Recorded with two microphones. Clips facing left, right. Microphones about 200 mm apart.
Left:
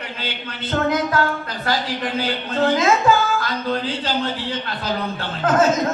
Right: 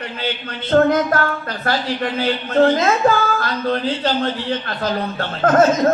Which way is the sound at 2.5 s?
50° right (ahead or behind).